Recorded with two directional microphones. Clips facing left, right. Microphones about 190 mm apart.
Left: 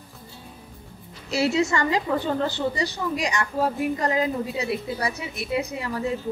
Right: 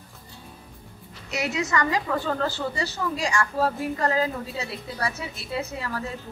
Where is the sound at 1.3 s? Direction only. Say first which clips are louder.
Left 5 dB; 30° left (ahead or behind).